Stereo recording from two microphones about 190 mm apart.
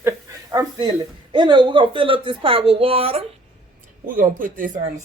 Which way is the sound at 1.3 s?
25° right (ahead or behind).